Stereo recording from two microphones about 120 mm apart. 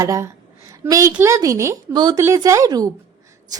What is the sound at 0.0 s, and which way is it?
A woman's voice, 25° right (ahead or behind).